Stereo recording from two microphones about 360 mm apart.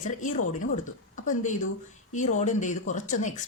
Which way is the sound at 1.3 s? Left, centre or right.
Left.